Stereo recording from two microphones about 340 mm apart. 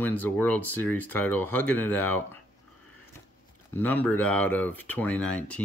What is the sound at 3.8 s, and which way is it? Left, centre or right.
Speech, centre.